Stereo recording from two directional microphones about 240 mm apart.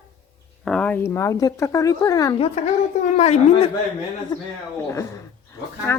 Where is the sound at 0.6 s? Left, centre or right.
Centre.